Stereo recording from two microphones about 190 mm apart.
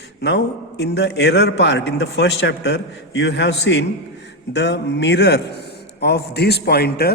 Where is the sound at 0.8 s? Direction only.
65° left (ahead or behind).